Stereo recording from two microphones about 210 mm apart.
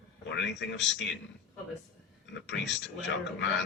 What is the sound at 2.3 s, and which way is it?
Speech, 60° left (ahead or behind).